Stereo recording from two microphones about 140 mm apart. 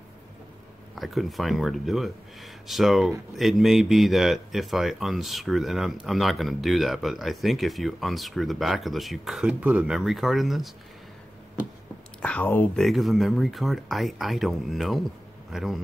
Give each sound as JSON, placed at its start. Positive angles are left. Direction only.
{"t": 0.9, "sound": "speech", "side_deg": 0}
{"t": 12.2, "sound": "speech", "side_deg": 10}
{"t": 12.8, "sound": "speech", "side_deg": 0}